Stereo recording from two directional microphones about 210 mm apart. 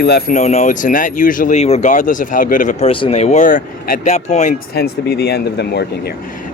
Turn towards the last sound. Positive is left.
turn(degrees=50)  # may be behind; listen again after turning